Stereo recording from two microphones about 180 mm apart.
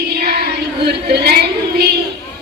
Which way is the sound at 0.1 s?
60° right (ahead or behind).